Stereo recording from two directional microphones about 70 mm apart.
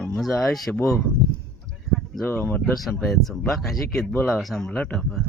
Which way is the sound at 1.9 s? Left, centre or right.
Centre.